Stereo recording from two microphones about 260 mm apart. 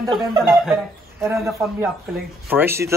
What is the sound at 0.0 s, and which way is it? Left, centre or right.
Speech, centre.